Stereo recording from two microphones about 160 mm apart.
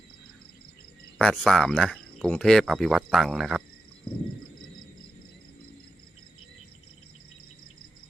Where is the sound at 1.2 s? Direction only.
5° left (ahead or behind).